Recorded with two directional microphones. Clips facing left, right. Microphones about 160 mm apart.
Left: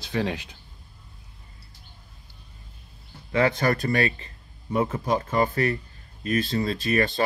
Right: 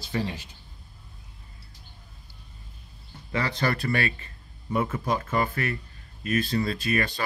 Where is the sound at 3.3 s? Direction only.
50° left (ahead or behind).